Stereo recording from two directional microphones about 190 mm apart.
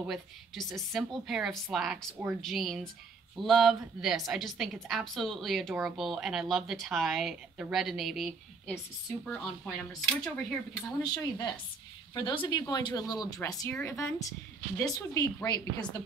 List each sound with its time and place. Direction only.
0.0 s a woman's voice: centre (ahead or behind)
10.0 s a woman's voice: 5° left (ahead or behind)
11.0 s a woman's voice: 20° left (ahead or behind)